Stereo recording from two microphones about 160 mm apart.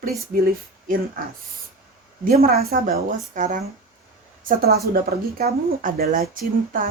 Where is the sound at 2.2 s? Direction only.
65° right (ahead or behind).